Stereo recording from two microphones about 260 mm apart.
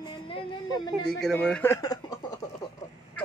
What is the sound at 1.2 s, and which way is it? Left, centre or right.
Speech, centre.